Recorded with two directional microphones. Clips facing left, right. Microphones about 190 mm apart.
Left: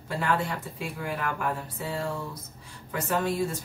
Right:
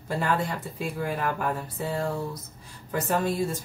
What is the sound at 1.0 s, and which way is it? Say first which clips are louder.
Speech: right 2 dB; 40° right (ahead or behind).